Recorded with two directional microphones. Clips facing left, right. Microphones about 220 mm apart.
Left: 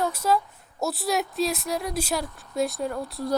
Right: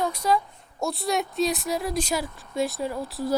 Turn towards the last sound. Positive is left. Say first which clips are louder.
# right 1 dB
turn(degrees=0)  # may be behind; listen again after turning